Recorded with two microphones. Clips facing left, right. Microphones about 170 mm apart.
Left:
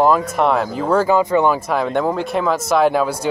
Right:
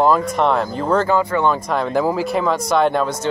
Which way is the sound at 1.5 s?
Centre (ahead or behind).